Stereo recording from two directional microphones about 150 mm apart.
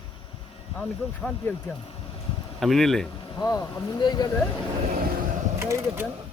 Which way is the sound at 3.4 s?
25° left (ahead or behind).